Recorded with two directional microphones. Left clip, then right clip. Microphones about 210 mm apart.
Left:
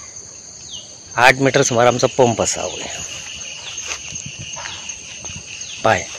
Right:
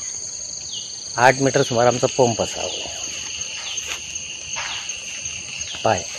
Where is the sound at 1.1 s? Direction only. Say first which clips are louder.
Left 3 dB; 20° left (ahead or behind).